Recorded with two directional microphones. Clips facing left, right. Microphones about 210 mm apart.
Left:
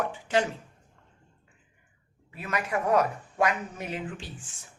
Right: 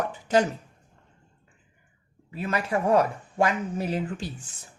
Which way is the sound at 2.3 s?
30° right (ahead or behind).